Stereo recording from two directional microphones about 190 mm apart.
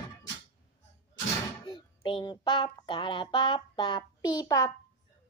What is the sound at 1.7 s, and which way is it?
A child's voice, 25° left (ahead or behind).